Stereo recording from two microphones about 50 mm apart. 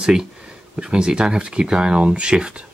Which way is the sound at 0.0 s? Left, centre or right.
Centre.